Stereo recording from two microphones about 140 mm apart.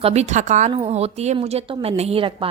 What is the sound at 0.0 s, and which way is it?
Speech, 50° right (ahead or behind).